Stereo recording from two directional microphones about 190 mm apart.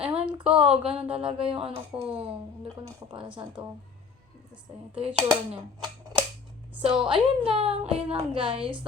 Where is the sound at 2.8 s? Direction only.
25° right (ahead or behind).